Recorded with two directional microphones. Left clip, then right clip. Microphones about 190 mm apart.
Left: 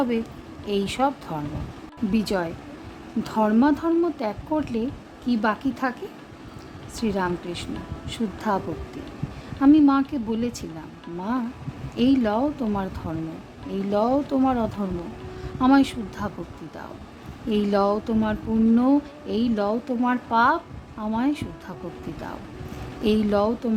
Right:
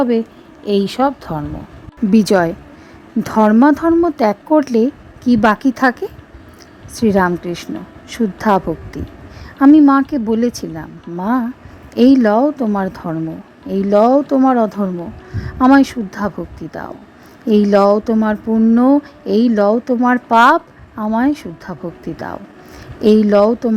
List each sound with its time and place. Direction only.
0.6 s a woman's voice: 35° right (ahead or behind)
6.9 s a woman's voice: 40° right (ahead or behind)
17.5 s a woman's voice: 35° right (ahead or behind)